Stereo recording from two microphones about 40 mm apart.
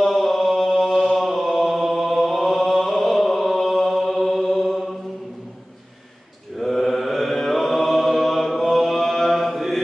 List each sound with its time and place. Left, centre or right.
0.0 s chant: centre
6.6 s mantra: centre